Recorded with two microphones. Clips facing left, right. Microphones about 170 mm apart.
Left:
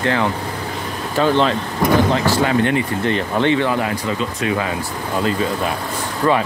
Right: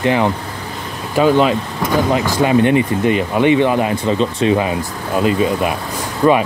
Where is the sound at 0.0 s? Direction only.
15° right (ahead or behind).